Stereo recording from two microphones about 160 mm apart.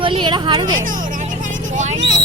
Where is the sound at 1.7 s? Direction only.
50° right (ahead or behind).